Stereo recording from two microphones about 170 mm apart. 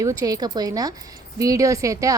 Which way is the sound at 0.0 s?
20° right (ahead or behind).